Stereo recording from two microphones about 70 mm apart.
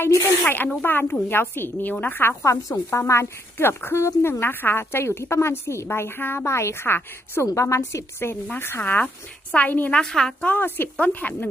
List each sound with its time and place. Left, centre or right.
0.0 s a woman's voice: left
0.4 s a woman's voice: left
2.4 s a woman's voice: left
7.4 s a woman's voice: left
10.0 s a woman's voice: centre
10.4 s a woman's voice: left